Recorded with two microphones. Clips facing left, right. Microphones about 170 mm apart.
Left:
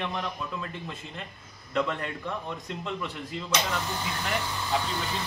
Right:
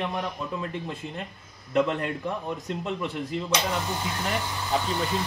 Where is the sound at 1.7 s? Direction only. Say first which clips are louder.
Right 5 dB; 15° right (ahead or behind).